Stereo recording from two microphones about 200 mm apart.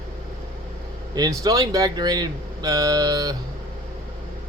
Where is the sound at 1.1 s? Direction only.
20° right (ahead or behind).